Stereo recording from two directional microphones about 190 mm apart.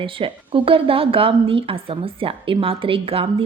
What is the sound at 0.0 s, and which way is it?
Speech, 25° right (ahead or behind).